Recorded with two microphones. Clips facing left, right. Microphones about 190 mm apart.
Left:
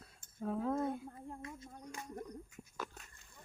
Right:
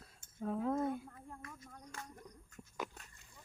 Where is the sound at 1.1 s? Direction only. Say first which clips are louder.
Left 5 dB; 25° left (ahead or behind).